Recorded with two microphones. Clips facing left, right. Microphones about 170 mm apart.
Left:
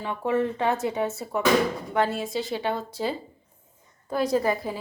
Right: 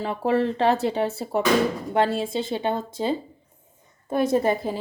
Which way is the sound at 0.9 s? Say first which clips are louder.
Right 3 dB; 30° right (ahead or behind).